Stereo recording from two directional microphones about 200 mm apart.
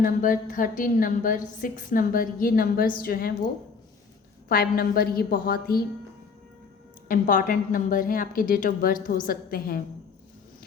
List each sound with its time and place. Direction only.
0.0 s a woman's voice: 40° left (ahead or behind)
4.4 s a woman's voice: 50° left (ahead or behind)
7.1 s a woman's voice: 40° left (ahead or behind)